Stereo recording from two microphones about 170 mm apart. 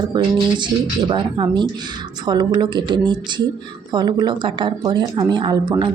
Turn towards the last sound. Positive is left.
turn(degrees=-25)  # may be behind; listen again after turning